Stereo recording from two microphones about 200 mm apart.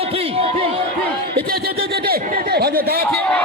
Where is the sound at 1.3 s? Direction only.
50° right (ahead or behind).